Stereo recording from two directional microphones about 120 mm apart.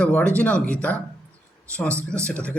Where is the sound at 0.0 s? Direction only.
10° left (ahead or behind).